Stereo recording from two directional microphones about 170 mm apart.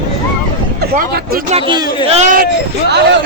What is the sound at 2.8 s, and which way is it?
Speech, 80° right.